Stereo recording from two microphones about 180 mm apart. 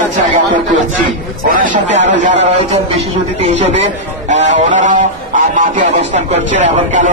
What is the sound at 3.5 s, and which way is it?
A man's voice, 35° right (ahead or behind).